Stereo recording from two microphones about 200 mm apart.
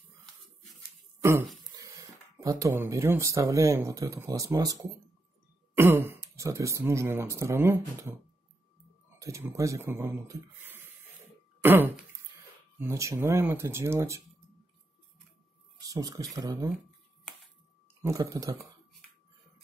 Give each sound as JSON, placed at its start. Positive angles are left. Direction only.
{"t": 1.8, "sound": "speech", "side_deg": -20}
{"t": 9.2, "sound": "speech", "side_deg": -15}
{"t": 15.9, "sound": "speech", "side_deg": -20}
{"t": 18.0, "sound": "speech", "side_deg": -15}